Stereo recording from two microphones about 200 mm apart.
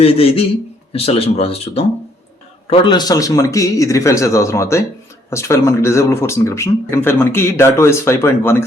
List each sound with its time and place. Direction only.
0.0 s speech: 30° left (ahead or behind); by 8.6 s 10° left (ahead or behind)